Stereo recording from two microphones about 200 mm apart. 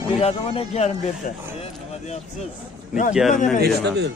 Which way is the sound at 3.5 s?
55° right (ahead or behind).